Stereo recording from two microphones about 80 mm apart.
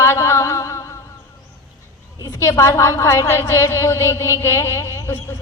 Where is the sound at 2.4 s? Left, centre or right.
Left.